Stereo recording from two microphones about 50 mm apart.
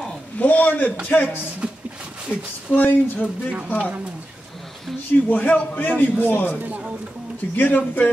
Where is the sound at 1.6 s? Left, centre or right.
Right.